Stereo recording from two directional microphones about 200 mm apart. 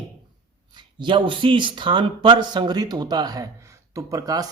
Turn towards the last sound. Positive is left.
turn(degrees=-20)  # may be behind; listen again after turning